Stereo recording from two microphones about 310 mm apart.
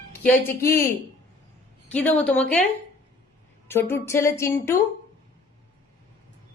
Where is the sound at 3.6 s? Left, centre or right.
Centre.